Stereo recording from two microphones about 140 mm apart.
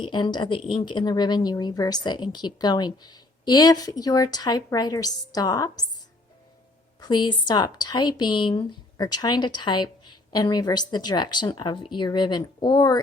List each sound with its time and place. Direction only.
0.0 s a woman's voice: 35° left (ahead or behind)
7.0 s speech: 30° left (ahead or behind)